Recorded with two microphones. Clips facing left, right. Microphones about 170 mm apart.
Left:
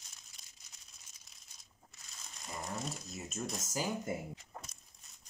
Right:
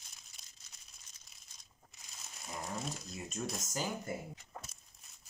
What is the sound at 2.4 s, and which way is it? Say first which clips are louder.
Speech: even; centre (ahead or behind).